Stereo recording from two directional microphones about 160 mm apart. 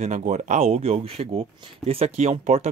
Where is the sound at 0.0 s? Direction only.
50° right (ahead or behind).